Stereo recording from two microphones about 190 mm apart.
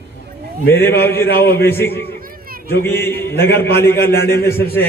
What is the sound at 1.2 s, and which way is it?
Speech, 55° left (ahead or behind).